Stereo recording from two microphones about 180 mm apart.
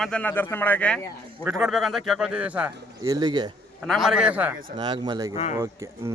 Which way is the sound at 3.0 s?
20° right (ahead or behind).